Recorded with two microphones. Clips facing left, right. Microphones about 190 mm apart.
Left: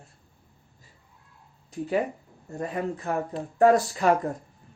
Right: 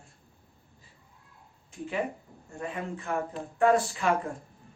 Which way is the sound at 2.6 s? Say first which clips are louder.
Left 5 dB; 40° left (ahead or behind).